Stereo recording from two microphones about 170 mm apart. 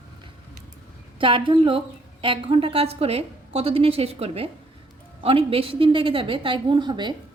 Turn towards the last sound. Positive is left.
turn(degrees=-25)  # may be behind; listen again after turning